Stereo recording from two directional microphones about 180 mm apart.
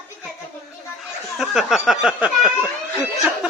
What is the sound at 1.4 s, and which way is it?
Speech, centre (ahead or behind).